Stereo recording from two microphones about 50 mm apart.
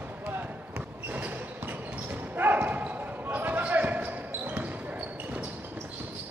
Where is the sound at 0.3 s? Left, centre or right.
Right.